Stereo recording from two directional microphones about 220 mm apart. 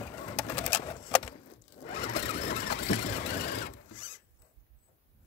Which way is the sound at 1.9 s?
30° left (ahead or behind).